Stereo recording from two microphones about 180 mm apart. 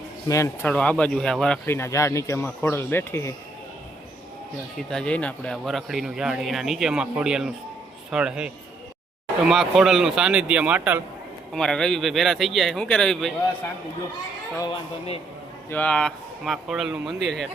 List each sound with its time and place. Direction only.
0.3 s speech: 15° left (ahead or behind)
4.8 s speech: 5° left (ahead or behind)
11.5 s speech: 5° left (ahead or behind)
14.7 s a man's voice: 35° left (ahead or behind)
15.7 s speech: 5° left (ahead or behind)